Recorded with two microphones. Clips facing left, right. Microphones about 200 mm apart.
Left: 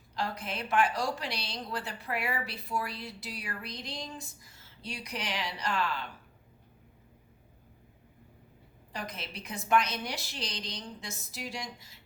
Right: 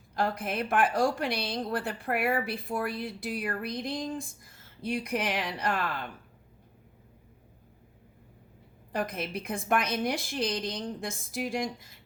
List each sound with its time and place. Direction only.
0.1 s a woman's voice: 50° right (ahead or behind)
8.9 s a woman's voice: 55° right (ahead or behind)